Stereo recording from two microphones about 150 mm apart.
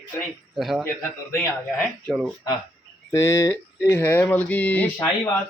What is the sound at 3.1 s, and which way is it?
Speech, 20° left (ahead or behind).